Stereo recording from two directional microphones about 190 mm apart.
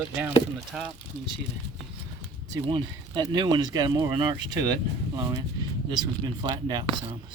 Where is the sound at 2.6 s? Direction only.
25° right (ahead or behind).